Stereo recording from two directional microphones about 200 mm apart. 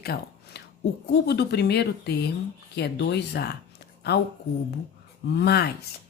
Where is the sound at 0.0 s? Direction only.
50° left (ahead or behind).